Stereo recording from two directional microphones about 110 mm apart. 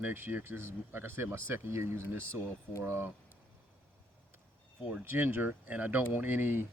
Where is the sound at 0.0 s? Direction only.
15° right (ahead or behind).